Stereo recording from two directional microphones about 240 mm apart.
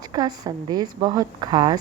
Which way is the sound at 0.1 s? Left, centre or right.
Centre.